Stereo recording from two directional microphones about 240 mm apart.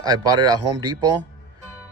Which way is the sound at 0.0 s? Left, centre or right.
Centre.